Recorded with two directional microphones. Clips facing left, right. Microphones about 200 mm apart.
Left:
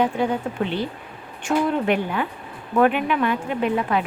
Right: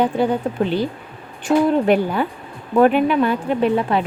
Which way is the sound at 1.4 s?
35° right (ahead or behind).